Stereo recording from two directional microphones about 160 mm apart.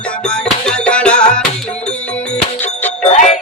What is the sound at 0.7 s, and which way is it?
Music, 5° left (ahead or behind).